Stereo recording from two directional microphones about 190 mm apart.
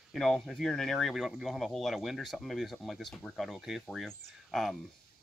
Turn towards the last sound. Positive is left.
turn(degrees=0)  # may be behind; listen again after turning